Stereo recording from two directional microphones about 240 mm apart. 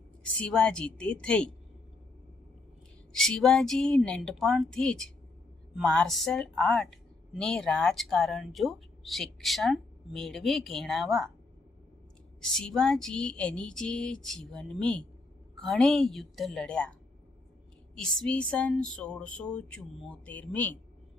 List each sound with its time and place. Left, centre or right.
0.2 s a woman's voice: centre
3.1 s a woman's voice: centre
12.4 s a woman's voice: centre
17.9 s a woman's voice: centre